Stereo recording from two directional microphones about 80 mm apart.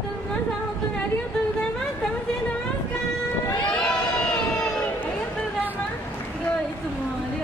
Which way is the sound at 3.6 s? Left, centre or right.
Centre.